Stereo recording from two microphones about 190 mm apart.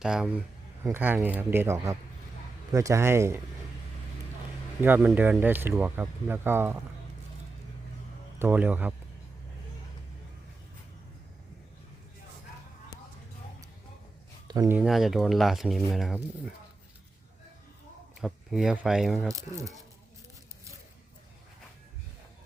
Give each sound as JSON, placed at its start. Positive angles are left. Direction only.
{"t": 0.0, "sound": "speech", "side_deg": -5}
{"t": 4.8, "sound": "speech", "side_deg": -10}
{"t": 8.4, "sound": "speech", "side_deg": -10}
{"t": 14.4, "sound": "a sound", "side_deg": -20}
{"t": 14.8, "sound": "speech", "side_deg": 0}
{"t": 18.2, "sound": "speech", "side_deg": 0}
{"t": 19.3, "sound": "speech", "side_deg": -15}